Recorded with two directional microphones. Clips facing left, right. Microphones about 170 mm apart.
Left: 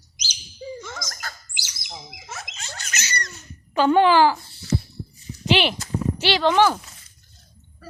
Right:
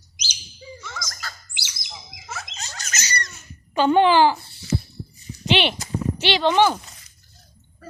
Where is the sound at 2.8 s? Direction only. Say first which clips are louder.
Right 1 dB; 40° right (ahead or behind).